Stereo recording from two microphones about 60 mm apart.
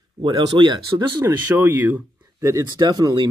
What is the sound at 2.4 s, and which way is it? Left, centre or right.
Speech, right.